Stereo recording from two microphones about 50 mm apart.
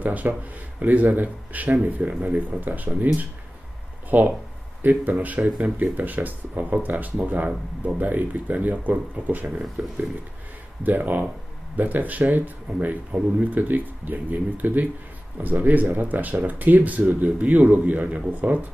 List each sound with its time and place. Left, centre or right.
0.0 s speech: right
4.1 s speech: right
9.8 s a sound: right
10.8 s speech: right